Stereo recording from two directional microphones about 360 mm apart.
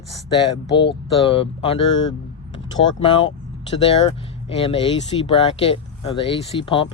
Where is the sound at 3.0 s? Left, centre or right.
Centre.